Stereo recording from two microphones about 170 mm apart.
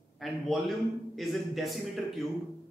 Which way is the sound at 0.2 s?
Centre (ahead or behind).